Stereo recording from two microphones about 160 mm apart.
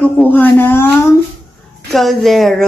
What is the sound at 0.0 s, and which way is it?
Speech, 10° left (ahead or behind).